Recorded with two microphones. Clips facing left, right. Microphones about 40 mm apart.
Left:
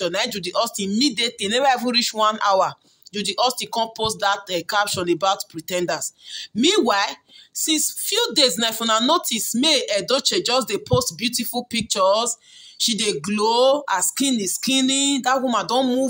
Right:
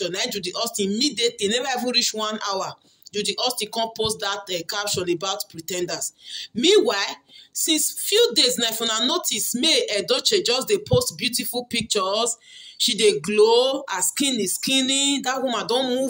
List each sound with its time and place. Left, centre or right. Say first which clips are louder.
0.0 s speech: left 4 dB; centre
0.3 s speech: left 5 dB; centre
2.2 s speech: left 8 dB; left
3.2 s speech: left 3 dB; centre
5.5 s speech: left 4 dB; left
5.9 s speech: left 2 dB; centre
8.5 s speech: left 3 dB; centre
9.5 s speech: left 2 dB; centre
10.3 s speech: even; centre
11.0 s speech: even; centre
12.7 s speech: right 4 dB; right
13.6 s speech: left 4 dB; centre
15.8 s speech: left 3 dB; right